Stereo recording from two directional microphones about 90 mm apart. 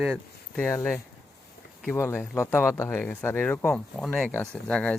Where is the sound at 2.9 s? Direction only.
15° left (ahead or behind).